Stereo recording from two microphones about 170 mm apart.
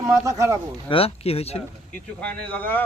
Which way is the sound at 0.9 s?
35° left (ahead or behind).